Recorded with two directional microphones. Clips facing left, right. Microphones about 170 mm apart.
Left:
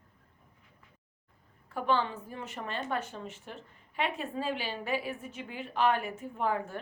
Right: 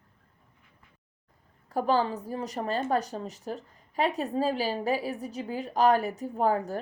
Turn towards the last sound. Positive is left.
turn(degrees=-40)  # may be behind; listen again after turning